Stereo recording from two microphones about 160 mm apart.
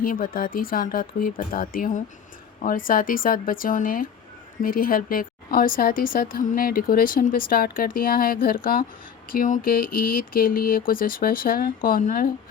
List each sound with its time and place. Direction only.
0.0 s a woman's voice: 60° left (ahead or behind)